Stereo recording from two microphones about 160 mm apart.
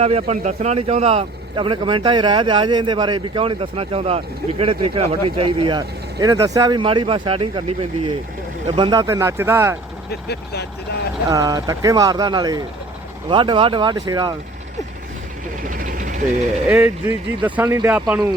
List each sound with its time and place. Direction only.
0.0 s speech: 40° right (ahead or behind); by 9.7 s 15° right (ahead or behind)
10.1 s speech: 90° left
11.3 s speech: 20° right (ahead or behind)
15.6 s vehicle: 55° right (ahead or behind)
16.6 s speech: 15° right (ahead or behind)
18.0 s speech: centre (ahead or behind)